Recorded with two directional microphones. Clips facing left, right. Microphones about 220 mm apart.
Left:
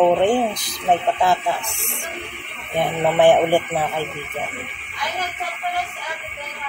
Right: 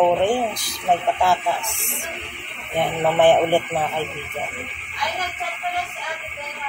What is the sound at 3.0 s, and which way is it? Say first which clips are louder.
Speech: left 1 dB; 10° left (ahead or behind).